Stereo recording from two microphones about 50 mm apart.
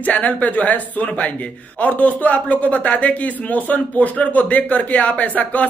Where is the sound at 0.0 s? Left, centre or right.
Left.